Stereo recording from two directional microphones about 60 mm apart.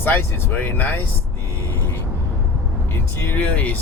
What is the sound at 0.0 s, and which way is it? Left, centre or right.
Speech, left.